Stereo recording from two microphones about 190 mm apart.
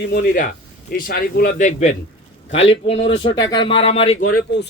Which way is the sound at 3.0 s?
70° left (ahead or behind).